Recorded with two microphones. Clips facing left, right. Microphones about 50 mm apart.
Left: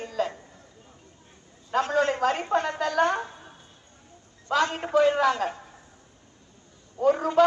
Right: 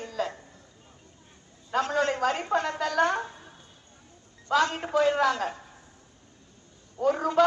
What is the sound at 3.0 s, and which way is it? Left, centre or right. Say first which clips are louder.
Speech: left 1 dB; left.